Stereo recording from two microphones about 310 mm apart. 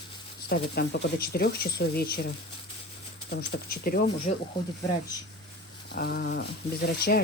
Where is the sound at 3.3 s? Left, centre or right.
Left.